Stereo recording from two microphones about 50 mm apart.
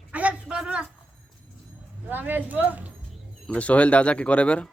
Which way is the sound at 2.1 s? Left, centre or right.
Right.